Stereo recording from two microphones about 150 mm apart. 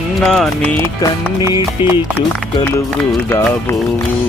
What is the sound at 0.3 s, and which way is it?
Music, centre (ahead or behind).